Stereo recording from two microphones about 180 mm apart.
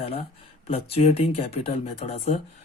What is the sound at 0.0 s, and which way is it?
Speech, 35° left (ahead or behind).